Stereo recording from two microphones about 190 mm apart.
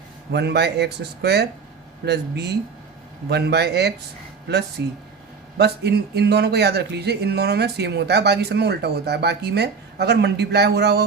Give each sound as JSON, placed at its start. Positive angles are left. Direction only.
{"t": 0.3, "sound": "a man's voice", "side_deg": -60}